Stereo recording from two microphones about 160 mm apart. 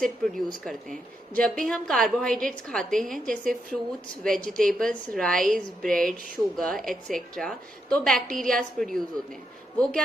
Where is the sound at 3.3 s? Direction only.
60° right (ahead or behind).